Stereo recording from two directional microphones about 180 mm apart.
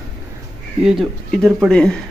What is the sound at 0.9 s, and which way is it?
Speech, centre (ahead or behind).